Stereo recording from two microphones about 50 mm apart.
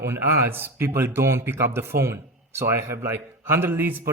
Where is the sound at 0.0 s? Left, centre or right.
Right.